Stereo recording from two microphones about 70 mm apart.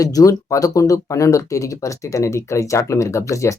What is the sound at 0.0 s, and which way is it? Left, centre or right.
Speech, left.